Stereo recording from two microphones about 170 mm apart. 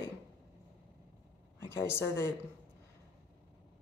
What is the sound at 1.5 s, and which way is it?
Speech, 15° left (ahead or behind).